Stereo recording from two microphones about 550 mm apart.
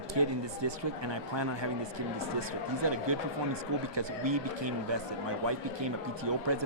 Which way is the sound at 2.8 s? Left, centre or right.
Right.